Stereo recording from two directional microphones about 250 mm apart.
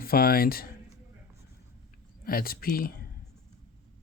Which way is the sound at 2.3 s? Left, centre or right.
Left.